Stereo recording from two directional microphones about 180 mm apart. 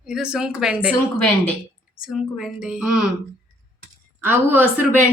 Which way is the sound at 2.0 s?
5° right (ahead or behind).